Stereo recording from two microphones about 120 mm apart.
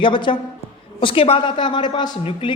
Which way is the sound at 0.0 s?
45° left (ahead or behind).